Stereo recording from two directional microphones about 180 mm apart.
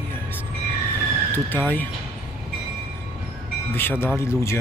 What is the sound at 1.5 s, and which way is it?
Speech, 10° left (ahead or behind).